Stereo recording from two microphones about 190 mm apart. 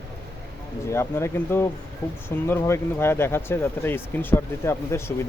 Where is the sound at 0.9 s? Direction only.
15° left (ahead or behind).